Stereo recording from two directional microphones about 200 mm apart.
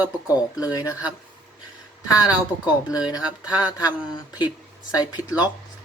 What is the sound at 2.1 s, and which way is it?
Speech, 20° left (ahead or behind).